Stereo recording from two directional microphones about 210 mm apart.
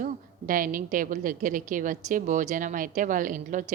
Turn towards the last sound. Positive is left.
turn(degrees=-40)  # may be behind; listen again after turning